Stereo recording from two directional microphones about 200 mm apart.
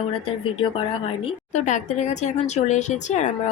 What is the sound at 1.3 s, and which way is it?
A woman's voice, 35° left (ahead or behind).